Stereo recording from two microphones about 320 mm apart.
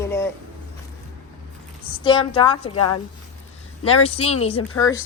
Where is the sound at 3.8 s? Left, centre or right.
Centre.